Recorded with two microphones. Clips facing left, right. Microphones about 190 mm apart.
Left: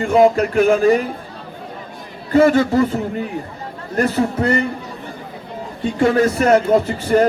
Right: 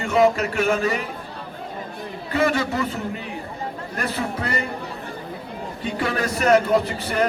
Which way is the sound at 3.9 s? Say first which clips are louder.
Left 10 dB; 45° left (ahead or behind).